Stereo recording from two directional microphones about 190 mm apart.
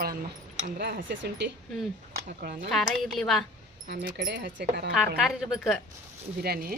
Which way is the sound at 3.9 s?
60° right (ahead or behind).